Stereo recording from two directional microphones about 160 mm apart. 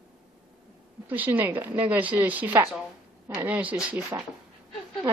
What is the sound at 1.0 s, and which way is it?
A woman's voice, 10° right (ahead or behind).